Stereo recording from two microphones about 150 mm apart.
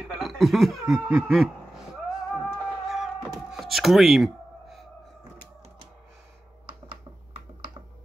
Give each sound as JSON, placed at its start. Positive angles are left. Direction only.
{"t": 0.1, "sound": "chuckle", "side_deg": 0}
{"t": 6.9, "sound": "computer keyboard", "side_deg": -35}